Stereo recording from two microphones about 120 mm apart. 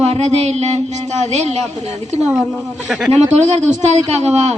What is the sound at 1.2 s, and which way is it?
Speech, 70° right (ahead or behind).